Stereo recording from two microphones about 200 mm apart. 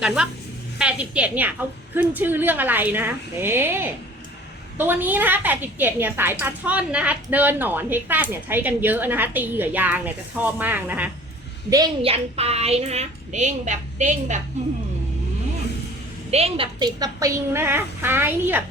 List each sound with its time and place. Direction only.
0.0 s a woman's voice: 5° right (ahead or behind)
11.7 s a woman's voice: 25° right (ahead or behind)
16.3 s a woman's voice: 30° right (ahead or behind); by 18.6 s 10° right (ahead or behind)